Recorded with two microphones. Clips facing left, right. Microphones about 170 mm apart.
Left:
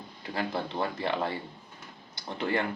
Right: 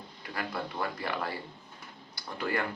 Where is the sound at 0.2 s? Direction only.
25° left (ahead or behind).